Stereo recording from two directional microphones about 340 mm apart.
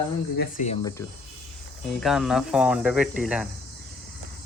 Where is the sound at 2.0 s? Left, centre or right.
Centre.